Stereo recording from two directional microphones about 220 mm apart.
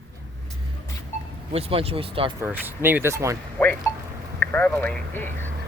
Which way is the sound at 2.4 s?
10° right (ahead or behind).